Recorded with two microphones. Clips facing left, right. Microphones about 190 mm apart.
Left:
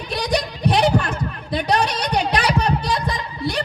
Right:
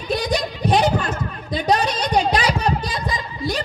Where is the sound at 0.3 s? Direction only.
65° left (ahead or behind).